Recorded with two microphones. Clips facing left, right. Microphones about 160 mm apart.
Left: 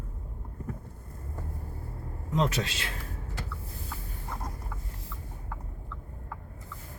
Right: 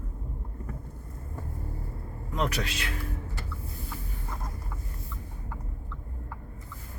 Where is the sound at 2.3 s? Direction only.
20° left (ahead or behind).